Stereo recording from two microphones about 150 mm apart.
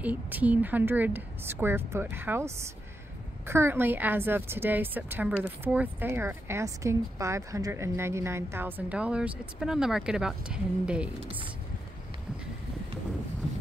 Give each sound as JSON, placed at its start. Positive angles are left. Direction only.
{"t": 0.0, "sound": "a woman's voice", "side_deg": -10}